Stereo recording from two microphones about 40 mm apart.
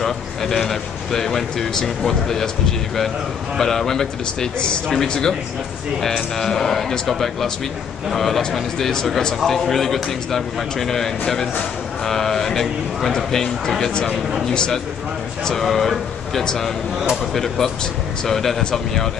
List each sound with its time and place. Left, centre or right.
0.0 s a man's voice: centre
3.5 s a man's voice: centre
14.5 s speech: centre
15.5 s a man's voice: centre
18.6 s speech: centre